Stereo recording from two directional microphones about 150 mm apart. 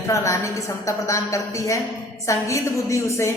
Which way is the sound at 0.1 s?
20° left (ahead or behind).